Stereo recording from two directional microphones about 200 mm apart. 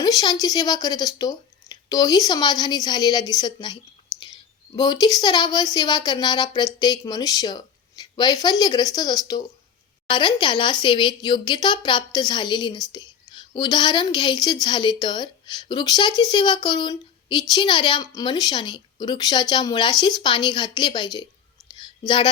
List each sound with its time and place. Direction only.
0.0 s a woman's voice: 20° left (ahead or behind)